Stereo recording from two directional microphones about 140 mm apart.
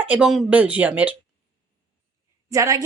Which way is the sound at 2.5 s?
25° right (ahead or behind).